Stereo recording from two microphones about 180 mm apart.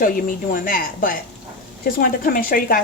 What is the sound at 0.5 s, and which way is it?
A woman's voice, 50° left (ahead or behind).